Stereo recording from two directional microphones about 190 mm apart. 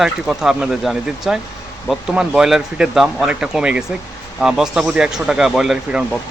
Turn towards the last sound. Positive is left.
turn(degrees=0)  # may be behind; listen again after turning